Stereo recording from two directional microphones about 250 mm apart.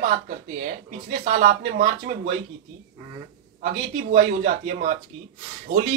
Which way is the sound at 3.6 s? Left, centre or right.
Right.